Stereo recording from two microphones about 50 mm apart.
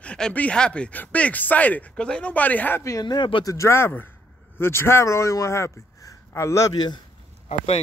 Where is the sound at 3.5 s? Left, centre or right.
Left.